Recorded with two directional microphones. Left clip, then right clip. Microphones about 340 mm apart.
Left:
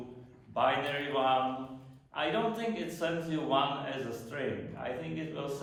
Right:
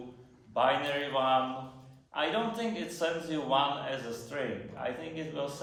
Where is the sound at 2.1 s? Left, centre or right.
Right.